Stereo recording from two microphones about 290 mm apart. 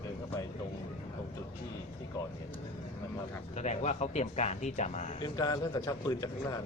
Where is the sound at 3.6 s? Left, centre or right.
Left.